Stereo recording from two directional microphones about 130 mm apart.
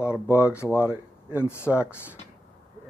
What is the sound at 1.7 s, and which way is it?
Speech, 10° right (ahead or behind).